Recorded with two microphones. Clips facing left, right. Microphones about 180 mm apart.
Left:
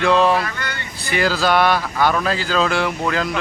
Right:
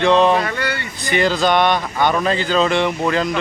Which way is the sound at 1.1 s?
5° left (ahead or behind).